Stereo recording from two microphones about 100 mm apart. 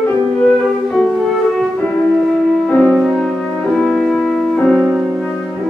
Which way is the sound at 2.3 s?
5° left (ahead or behind).